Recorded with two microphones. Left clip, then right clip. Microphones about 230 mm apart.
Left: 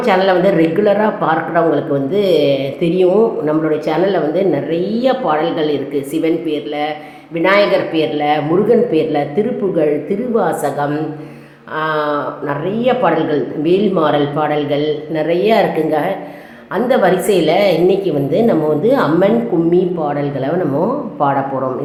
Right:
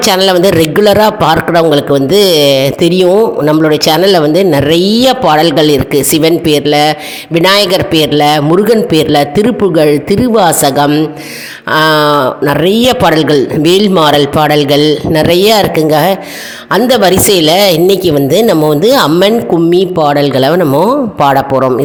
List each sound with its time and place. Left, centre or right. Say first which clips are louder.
0.0 s speech: right 5 dB; right